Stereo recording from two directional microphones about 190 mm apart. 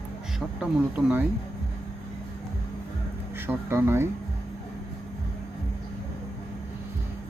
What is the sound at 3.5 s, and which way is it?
Speech, 15° right (ahead or behind).